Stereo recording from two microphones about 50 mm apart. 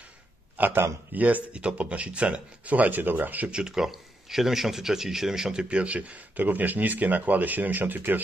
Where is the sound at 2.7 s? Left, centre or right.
Right.